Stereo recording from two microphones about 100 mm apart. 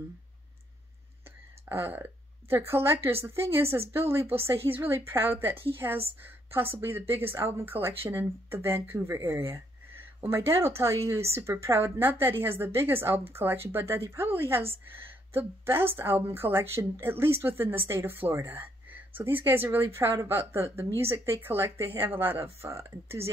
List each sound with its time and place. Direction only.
1.7 s a woman's voice: 25° right (ahead or behind)